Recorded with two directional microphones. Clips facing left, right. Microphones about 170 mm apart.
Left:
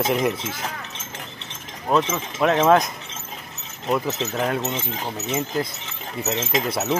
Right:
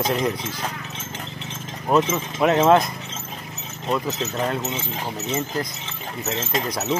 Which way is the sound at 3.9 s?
5° left (ahead or behind).